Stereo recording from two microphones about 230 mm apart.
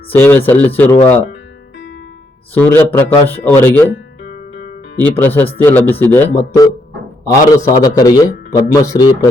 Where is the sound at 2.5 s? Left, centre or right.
Centre.